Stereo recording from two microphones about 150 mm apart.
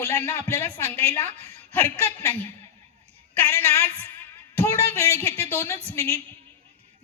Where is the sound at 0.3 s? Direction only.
15° left (ahead or behind).